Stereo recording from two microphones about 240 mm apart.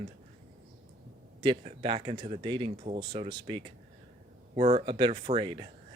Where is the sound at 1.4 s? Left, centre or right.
Right.